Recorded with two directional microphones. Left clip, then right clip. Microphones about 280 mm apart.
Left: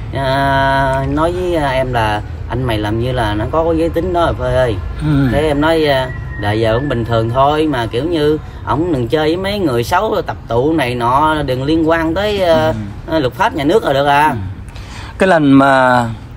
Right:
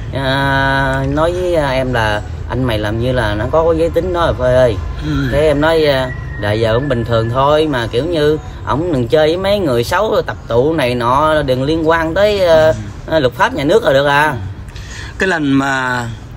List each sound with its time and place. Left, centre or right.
0.1 s speech: centre
15.1 s speech: centre